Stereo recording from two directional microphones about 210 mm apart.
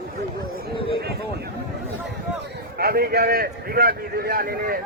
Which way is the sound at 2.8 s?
45° right (ahead or behind).